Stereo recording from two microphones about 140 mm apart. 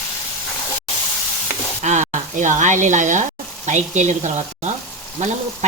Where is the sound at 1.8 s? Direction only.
60° right (ahead or behind).